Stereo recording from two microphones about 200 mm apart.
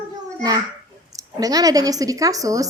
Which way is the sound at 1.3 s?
20° right (ahead or behind).